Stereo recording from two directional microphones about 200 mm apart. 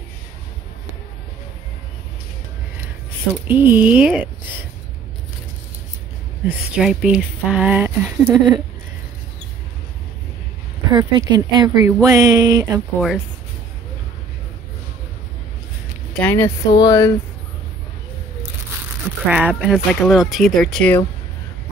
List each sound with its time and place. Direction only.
3.4 s speech: 10° right (ahead or behind)
6.4 s speech: 5° right (ahead or behind)
10.9 s speech: 20° right (ahead or behind)
16.1 s speech: 10° left (ahead or behind)
19.2 s speech: 5° right (ahead or behind)